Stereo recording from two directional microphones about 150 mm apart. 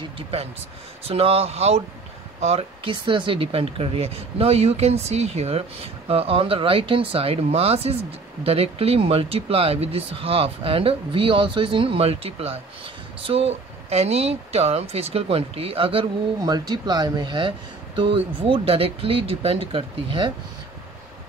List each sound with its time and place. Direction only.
1.0 s speech: 40° right (ahead or behind)
16.3 s speech: 25° right (ahead or behind)